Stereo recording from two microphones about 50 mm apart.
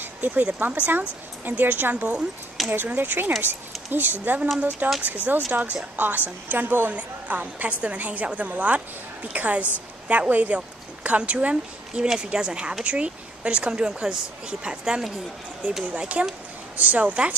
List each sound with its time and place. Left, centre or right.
0.0 s a woman's voice: right
2.6 s speech: centre
3.0 s a woman's voice: right; by 15.0 s centre
15.9 s a woman's voice: right